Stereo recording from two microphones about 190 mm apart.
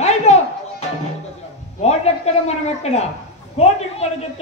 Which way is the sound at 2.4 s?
35° left (ahead or behind).